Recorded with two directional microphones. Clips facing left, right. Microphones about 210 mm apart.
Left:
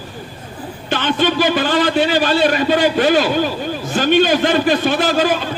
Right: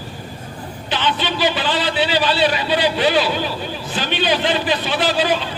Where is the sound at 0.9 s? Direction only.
50° left (ahead or behind).